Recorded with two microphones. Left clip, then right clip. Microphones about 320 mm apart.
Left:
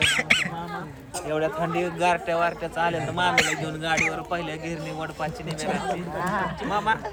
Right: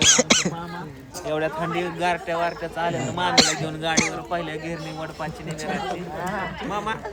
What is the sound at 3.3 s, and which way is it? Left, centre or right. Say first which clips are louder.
Speech: right 7 dB; centre.